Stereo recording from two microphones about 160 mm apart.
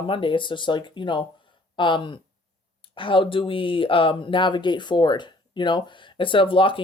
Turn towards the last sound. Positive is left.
turn(degrees=35)  # may be behind; listen again after turning